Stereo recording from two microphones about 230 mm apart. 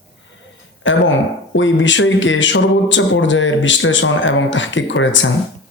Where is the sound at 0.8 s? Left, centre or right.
Left.